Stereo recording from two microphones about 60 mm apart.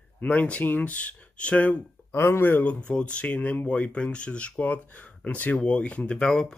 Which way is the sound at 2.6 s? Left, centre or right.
Left.